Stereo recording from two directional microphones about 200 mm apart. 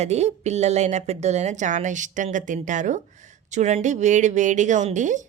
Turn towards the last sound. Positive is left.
turn(degrees=-40)  # may be behind; listen again after turning